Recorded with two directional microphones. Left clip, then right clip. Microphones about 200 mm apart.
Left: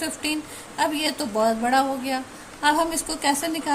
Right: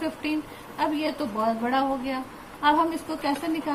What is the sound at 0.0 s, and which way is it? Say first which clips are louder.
A woman's voice: left 1 dB; 55° left (ahead or behind).